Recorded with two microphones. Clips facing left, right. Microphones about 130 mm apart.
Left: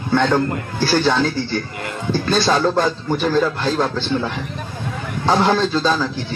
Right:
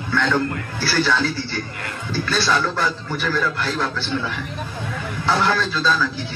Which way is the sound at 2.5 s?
50° left (ahead or behind).